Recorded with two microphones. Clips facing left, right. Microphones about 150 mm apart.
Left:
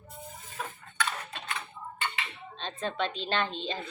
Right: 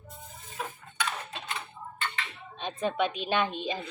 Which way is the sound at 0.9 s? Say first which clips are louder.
Even; 15° right (ahead or behind).